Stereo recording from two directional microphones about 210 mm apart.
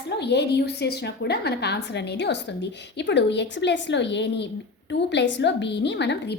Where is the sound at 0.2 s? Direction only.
55° left (ahead or behind).